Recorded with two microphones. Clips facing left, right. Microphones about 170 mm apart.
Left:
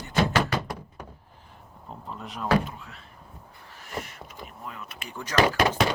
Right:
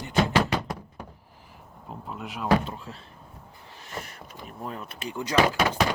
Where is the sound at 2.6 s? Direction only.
30° right (ahead or behind).